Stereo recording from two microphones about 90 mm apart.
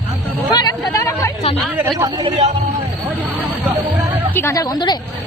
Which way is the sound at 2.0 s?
40° right (ahead or behind).